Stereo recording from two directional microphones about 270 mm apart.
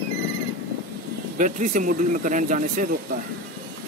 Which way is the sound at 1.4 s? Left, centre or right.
Right.